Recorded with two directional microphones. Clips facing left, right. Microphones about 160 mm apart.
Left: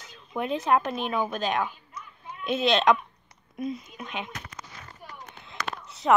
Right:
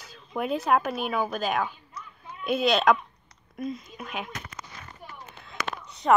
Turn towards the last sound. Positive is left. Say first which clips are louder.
# even
turn(degrees=0)  # may be behind; listen again after turning